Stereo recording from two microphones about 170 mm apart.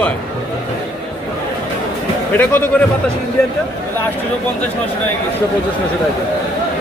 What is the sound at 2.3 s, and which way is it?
Speech, 10° left (ahead or behind).